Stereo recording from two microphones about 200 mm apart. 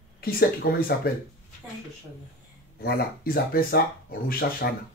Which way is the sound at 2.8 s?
50° left (ahead or behind).